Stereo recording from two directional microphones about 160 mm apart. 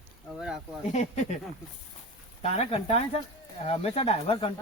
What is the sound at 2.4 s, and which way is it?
Speech, 40° left (ahead or behind).